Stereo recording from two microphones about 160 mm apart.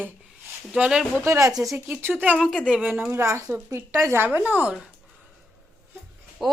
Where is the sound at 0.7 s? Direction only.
5° right (ahead or behind).